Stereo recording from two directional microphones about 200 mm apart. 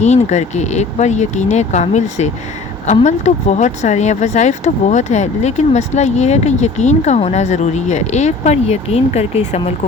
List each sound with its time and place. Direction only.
0.0 s speech: 35° left (ahead or behind)